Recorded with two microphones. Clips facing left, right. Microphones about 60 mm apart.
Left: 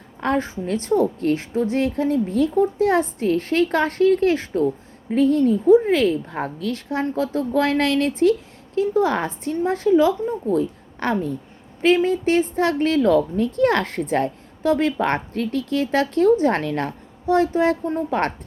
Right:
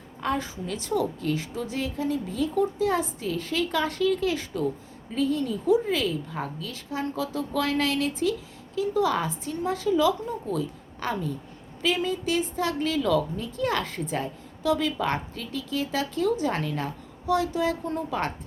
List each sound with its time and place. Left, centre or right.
0.2 s speech: left
7.0 s a woman's voice: left
14.6 s speech: left